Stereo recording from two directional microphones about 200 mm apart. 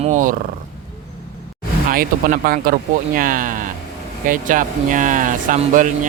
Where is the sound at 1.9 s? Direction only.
45° right (ahead or behind).